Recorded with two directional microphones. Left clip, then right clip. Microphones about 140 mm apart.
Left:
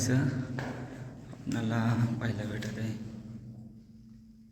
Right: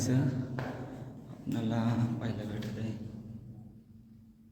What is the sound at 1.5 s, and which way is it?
A man's voice, 5° left (ahead or behind).